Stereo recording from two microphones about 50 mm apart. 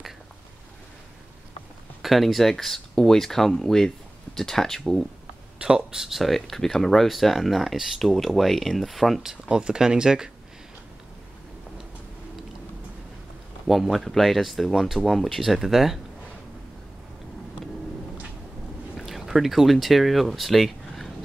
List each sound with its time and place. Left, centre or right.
2.0 s speech: centre
5.6 s speech: centre
6.0 s speech: centre
9.3 s speech: centre
13.7 s speech: centre
18.9 s speech: centre